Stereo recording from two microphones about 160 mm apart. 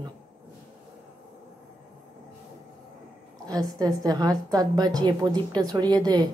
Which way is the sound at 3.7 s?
25° right (ahead or behind).